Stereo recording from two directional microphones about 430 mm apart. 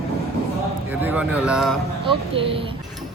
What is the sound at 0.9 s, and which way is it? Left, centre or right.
Speech, centre.